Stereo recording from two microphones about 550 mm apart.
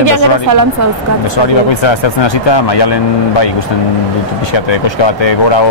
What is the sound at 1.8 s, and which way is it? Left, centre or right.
A man's voice, left.